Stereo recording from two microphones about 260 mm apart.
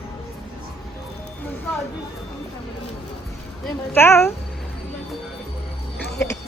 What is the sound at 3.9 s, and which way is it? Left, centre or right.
Speech, centre.